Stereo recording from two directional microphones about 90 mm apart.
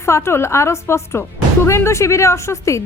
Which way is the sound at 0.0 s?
30° left (ahead or behind).